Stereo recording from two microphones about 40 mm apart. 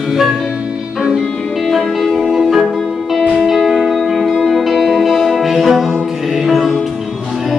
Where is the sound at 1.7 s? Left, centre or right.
Centre.